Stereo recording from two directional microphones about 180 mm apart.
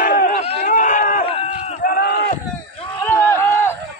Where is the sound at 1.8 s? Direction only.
55° left (ahead or behind).